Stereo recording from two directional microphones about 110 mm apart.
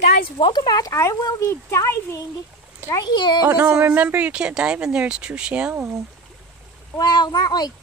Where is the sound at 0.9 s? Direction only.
30° left (ahead or behind).